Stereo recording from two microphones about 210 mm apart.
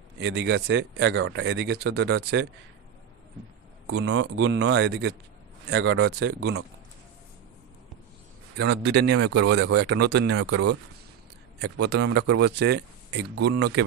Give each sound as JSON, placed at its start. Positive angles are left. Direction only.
{"t": 0.2, "sound": "speech", "side_deg": -55}
{"t": 3.9, "sound": "speech", "side_deg": -70}
{"t": 8.5, "sound": "speech", "side_deg": -55}
{"t": 11.7, "sound": "speech", "side_deg": -55}